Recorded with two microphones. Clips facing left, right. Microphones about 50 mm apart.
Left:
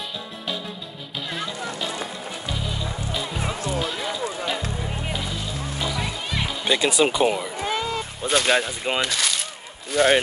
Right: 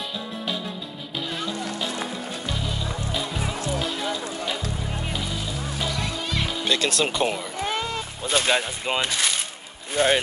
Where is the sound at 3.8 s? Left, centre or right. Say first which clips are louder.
Left 1 dB; centre.